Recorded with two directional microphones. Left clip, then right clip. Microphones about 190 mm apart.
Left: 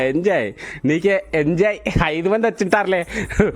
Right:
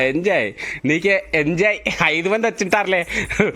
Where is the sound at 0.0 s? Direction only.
20° left (ahead or behind).